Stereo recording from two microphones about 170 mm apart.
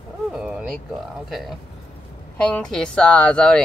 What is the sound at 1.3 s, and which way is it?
A woman's voice, centre (ahead or behind).